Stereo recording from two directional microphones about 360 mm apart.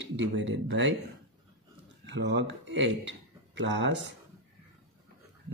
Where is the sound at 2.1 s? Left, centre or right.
Right.